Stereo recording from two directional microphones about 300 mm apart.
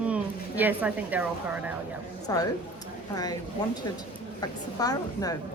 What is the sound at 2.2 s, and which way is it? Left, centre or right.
Speech, centre.